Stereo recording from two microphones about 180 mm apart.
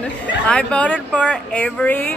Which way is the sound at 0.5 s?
5° left (ahead or behind).